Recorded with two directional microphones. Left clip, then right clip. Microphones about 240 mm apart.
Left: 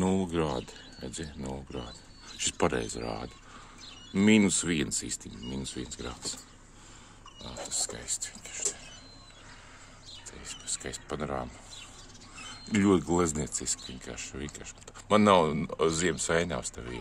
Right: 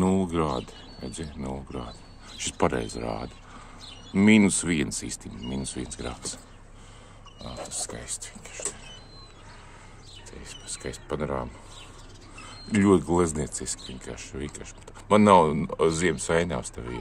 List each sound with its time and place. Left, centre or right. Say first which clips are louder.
0.0 s speech: right 4 dB; centre
7.4 s speech: even; centre
10.4 s speech: right 1 dB; centre